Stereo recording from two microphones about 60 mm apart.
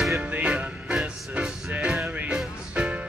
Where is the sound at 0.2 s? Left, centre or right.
Right.